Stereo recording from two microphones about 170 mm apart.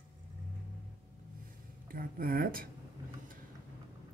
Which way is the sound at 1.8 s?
55° right (ahead or behind).